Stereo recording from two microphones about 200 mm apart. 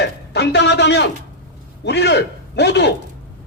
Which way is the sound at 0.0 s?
60° left (ahead or behind).